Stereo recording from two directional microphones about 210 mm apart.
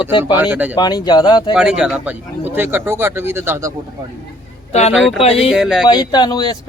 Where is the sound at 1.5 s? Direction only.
5° right (ahead or behind).